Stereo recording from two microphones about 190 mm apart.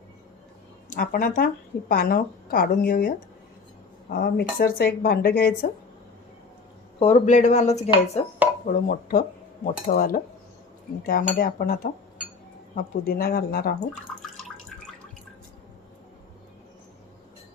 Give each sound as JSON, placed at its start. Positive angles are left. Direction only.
{"t": 0.9, "sound": "a woman's voice", "side_deg": 45}
{"t": 4.1, "sound": "speech", "side_deg": 55}
{"t": 7.0, "sound": "a woman's voice", "side_deg": 35}
{"t": 14.2, "sound": "water", "side_deg": 0}